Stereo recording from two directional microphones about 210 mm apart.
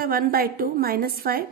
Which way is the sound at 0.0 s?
45° right (ahead or behind).